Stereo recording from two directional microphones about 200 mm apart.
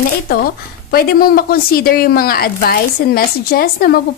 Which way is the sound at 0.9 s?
50° left (ahead or behind).